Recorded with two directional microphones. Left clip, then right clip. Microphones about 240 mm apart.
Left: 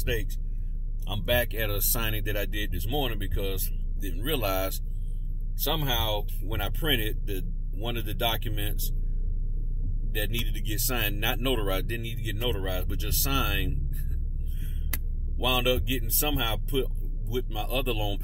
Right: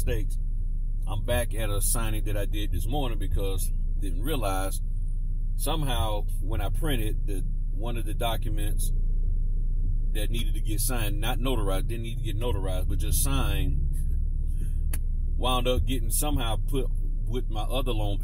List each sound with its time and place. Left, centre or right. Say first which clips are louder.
1.0 s speech: left 3 dB; centre
10.1 s speech: left 4 dB; centre
15.3 s speech: left 1 dB; centre